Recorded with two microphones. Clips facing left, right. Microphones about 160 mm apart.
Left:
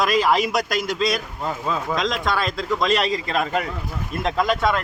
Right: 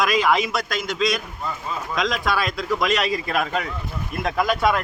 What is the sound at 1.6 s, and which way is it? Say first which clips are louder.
Speech: left 5 dB; 85° left.